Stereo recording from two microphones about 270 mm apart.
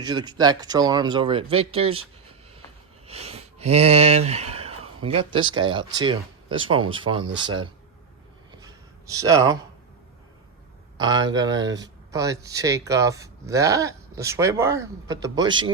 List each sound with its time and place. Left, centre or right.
0.0 s speech: centre
3.1 s speech: right
8.6 s a sound: centre
10.9 s speech: centre